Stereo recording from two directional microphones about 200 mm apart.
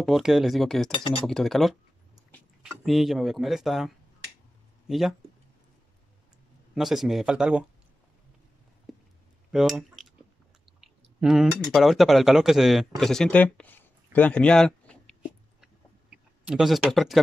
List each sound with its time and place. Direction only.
0.0 s speech: centre (ahead or behind)
0.9 s speech: 30° left (ahead or behind)
1.2 s speech: centre (ahead or behind)
6.7 s speech: centre (ahead or behind)
8.9 s a sound: centre (ahead or behind)
9.5 s speech: centre (ahead or behind)
16.4 s speech: centre (ahead or behind)